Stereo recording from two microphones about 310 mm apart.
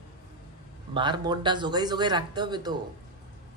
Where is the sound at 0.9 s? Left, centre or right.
Centre.